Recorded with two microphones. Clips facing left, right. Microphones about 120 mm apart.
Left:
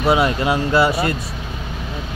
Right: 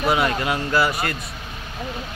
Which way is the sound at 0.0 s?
25° left (ahead or behind).